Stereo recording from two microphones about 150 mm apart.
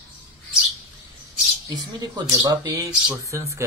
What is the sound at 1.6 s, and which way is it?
Speech, 25° right (ahead or behind).